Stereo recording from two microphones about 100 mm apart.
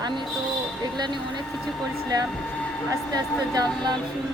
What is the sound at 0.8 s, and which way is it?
Speech, 45° right (ahead or behind).